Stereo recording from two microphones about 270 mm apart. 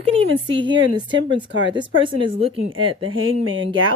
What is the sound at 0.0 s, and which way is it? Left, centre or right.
Speech, right.